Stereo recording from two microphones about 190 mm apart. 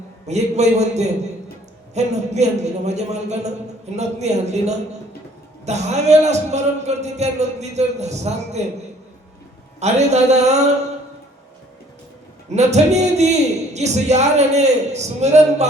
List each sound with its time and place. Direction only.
0.3 s a man's voice: 35° right (ahead or behind)
9.8 s a man's voice: 35° right (ahead or behind)
12.5 s a man's voice: 35° right (ahead or behind)